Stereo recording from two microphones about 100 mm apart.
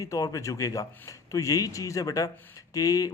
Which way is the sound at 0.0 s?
35° left (ahead or behind).